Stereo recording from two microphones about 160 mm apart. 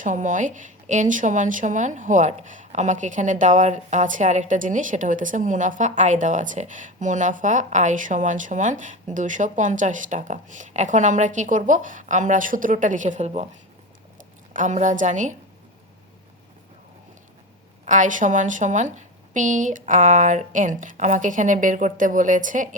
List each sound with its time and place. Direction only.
0.0 s speech: 50° right (ahead or behind)
14.2 s speech: 55° right (ahead or behind)
17.8 s speech: 50° right (ahead or behind)